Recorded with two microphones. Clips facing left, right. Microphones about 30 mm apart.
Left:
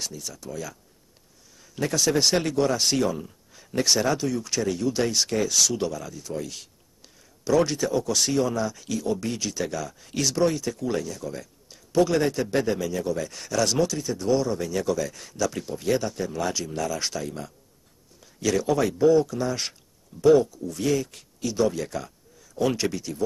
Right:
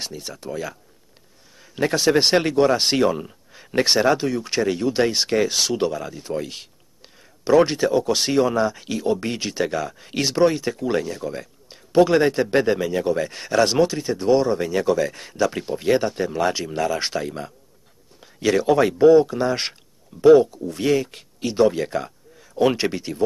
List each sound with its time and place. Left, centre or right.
0.0 s speech: right